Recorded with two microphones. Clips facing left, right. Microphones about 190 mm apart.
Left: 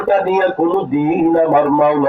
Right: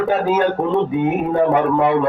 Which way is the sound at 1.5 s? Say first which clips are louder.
Left 4 dB; 55° left (ahead or behind).